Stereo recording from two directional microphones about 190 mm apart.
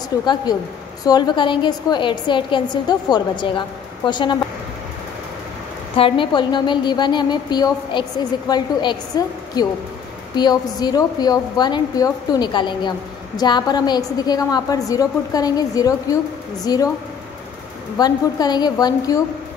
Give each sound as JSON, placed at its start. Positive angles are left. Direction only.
{"t": 0.2, "sound": "a woman's voice", "side_deg": 20}
{"t": 5.9, "sound": "a woman's voice", "side_deg": 25}
{"t": 17.9, "sound": "a woman's voice", "side_deg": 20}